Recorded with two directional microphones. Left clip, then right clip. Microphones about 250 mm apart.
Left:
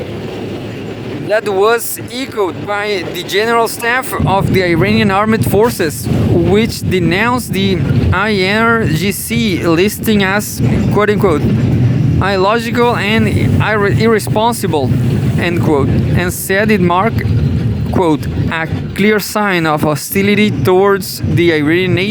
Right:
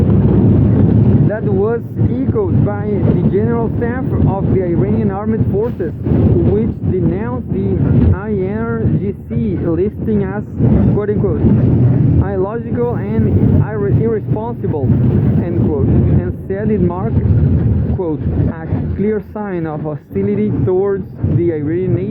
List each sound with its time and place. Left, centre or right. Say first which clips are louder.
1.3 s speech: left 10 dB; left
2.9 s speech: left 1 dB; left
18.9 s speech: left 7 dB; left